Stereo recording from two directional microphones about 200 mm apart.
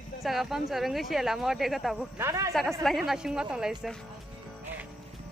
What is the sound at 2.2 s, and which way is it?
Speech, 15° right (ahead or behind).